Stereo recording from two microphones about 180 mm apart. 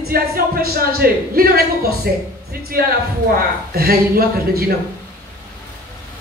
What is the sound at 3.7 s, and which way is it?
Speech, 55° right (ahead or behind).